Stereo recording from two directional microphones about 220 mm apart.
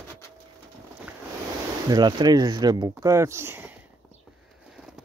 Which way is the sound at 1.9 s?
20° right (ahead or behind).